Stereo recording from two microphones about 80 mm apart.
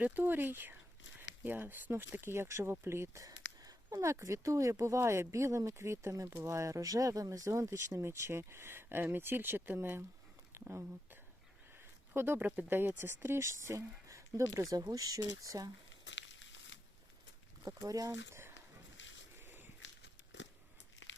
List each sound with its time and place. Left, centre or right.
0.0 s speech: right
3.2 s a sound: right
3.9 s speech: right
12.1 s speech: right
17.6 s speech: right
19.4 s walk: right